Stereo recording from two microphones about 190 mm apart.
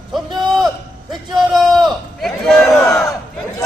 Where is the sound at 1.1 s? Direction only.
Centre (ahead or behind).